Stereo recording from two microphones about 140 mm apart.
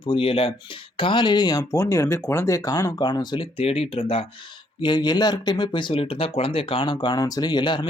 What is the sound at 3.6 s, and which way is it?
Speech, 45° left (ahead or behind).